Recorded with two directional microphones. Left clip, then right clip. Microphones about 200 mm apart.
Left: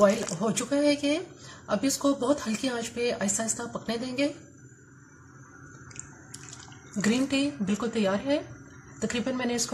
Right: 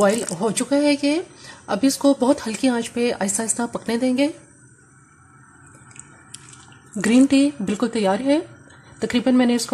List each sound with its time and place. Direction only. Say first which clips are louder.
0.0 s speech: right 4 dB; 50° right (ahead or behind)
7.0 s speech: right 10 dB; 50° right (ahead or behind)